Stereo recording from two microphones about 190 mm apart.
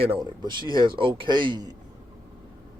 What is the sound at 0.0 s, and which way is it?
A man's voice, 25° right (ahead or behind).